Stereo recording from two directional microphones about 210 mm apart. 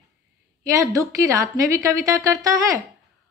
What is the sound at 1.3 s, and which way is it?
Speech, 15° right (ahead or behind).